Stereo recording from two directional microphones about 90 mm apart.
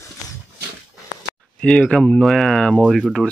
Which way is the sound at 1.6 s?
10° left (ahead or behind).